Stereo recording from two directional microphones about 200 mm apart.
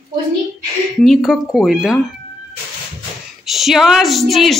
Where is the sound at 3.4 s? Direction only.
Centre (ahead or behind).